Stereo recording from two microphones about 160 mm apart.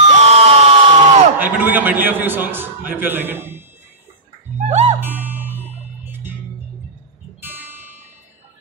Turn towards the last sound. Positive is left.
turn(degrees=-10)  # may be behind; listen again after turning